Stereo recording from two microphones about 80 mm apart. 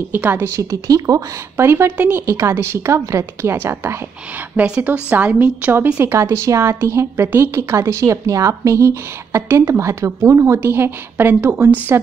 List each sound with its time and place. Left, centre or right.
0.1 s a woman's voice: right
0.6 s speech: right
1.6 s a woman's voice: right
4.6 s a woman's voice: centre
5.9 s a woman's voice: right